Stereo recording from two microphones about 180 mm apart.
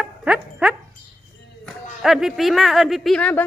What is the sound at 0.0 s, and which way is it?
Dog, 5° right (ahead or behind).